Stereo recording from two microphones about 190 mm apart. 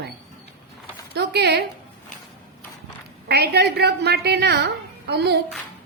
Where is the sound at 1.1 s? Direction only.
60° right (ahead or behind).